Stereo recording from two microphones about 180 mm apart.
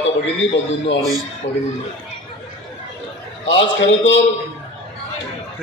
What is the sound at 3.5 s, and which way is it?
Speech, 90° left.